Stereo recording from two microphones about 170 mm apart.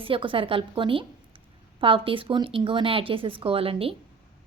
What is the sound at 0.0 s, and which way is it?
Speech, 30° right (ahead or behind).